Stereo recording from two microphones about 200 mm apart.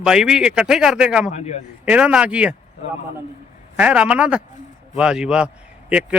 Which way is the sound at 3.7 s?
5° right (ahead or behind).